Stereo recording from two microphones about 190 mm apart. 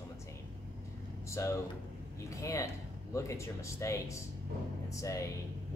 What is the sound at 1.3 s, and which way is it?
Speech, 15° left (ahead or behind).